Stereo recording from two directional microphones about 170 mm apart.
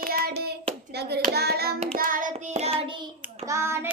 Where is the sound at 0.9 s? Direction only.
70° right (ahead or behind).